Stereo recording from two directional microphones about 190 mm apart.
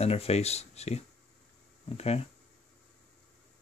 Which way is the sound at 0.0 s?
30° left (ahead or behind).